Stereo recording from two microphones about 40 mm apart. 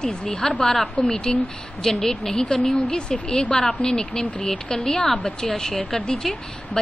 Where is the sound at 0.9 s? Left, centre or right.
Left.